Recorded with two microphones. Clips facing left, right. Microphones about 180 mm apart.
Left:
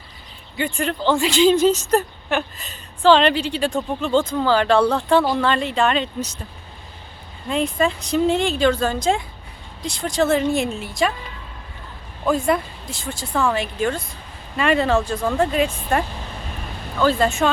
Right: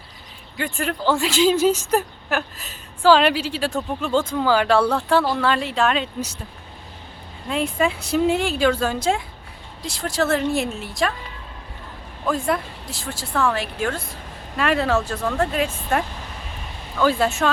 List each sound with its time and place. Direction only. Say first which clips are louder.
0.5 s speech: left 2 dB; centre (ahead or behind)
7.4 s a woman's voice: left 1 dB; 5° right (ahead or behind)
12.2 s speech: left 3 dB; centre (ahead or behind)